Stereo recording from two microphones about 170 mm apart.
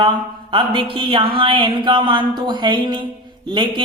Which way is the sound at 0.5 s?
30° right (ahead or behind).